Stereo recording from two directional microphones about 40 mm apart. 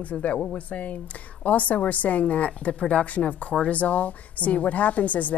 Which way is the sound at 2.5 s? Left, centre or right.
Left.